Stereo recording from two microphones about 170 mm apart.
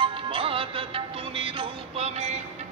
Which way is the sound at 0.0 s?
30° right (ahead or behind).